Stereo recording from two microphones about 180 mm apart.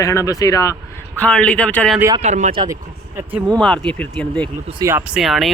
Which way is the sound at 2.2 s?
40° right (ahead or behind).